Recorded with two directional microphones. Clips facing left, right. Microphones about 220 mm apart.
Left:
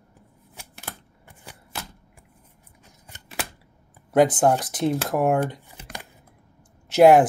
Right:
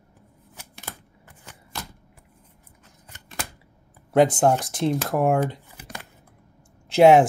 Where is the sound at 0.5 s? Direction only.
5° left (ahead or behind).